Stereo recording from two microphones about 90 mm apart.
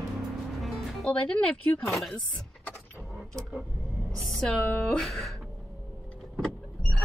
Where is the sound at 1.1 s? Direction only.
15° left (ahead or behind).